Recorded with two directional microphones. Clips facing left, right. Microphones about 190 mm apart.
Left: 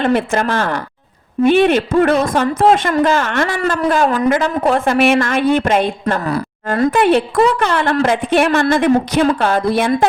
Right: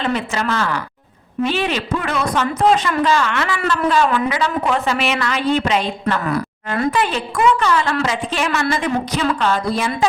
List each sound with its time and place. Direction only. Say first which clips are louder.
0.0 s a woman's voice: left 6 dB; 55° left (ahead or behind)
6.1 s a woman's voice: left 2 dB; 35° left (ahead or behind)
7.6 s a woman's voice: left 3 dB; 60° left (ahead or behind)